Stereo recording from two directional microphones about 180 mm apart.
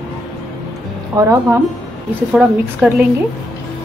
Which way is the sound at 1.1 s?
15° right (ahead or behind).